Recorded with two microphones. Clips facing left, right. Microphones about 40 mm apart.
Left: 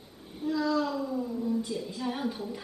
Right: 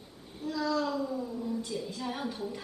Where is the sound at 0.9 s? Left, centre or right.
Centre.